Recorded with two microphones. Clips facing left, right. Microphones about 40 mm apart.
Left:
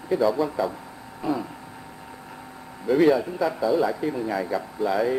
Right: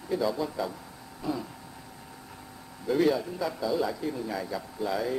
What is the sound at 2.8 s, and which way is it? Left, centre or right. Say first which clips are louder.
Speech: left 6 dB; centre.